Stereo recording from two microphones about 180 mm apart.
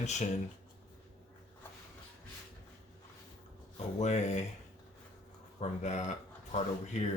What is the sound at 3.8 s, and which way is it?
Speech, 40° left (ahead or behind).